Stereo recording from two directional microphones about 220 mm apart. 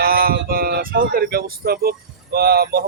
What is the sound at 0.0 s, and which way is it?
Speech, 45° right (ahead or behind).